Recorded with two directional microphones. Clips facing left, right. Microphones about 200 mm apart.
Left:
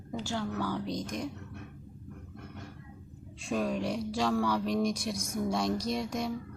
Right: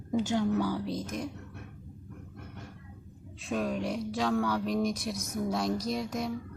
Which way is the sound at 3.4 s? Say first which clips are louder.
Even; centre (ahead or behind).